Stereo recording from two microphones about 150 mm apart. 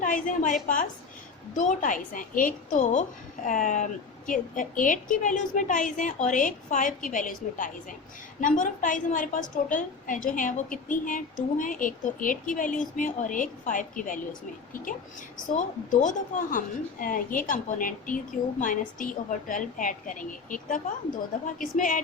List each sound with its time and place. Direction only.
0.0 s a woman's voice: 65° left (ahead or behind)
15.4 s a woman's voice: 60° left (ahead or behind)